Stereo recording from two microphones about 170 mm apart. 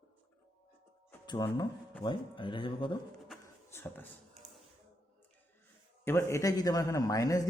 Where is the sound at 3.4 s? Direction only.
15° left (ahead or behind).